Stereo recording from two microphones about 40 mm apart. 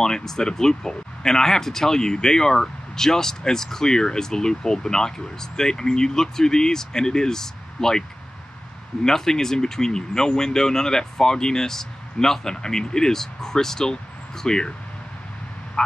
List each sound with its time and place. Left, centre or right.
0.0 s speech: centre
9.0 s speech: centre